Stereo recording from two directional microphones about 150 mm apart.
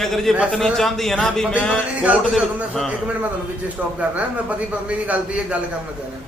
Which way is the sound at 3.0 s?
10° right (ahead or behind).